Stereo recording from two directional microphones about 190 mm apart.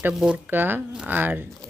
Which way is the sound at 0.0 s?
5° right (ahead or behind).